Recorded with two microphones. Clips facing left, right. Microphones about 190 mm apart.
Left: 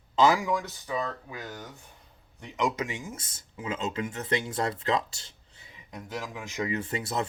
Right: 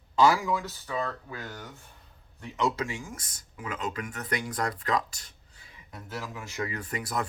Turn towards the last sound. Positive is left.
turn(degrees=25)  # may be behind; listen again after turning